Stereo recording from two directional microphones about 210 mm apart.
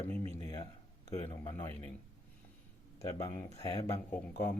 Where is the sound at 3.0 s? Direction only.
15° left (ahead or behind).